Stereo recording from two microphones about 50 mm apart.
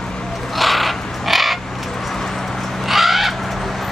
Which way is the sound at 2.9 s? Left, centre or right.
Centre.